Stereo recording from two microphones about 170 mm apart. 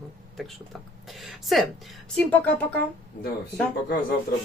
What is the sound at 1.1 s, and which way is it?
Speech, centre (ahead or behind).